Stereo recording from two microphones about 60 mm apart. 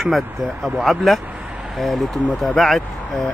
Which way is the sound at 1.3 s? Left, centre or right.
Right.